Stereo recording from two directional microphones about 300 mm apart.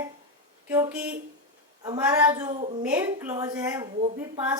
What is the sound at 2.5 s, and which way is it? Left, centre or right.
Speech, right.